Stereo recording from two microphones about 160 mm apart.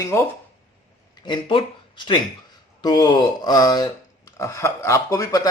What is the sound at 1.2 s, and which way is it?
Speech, 30° left (ahead or behind).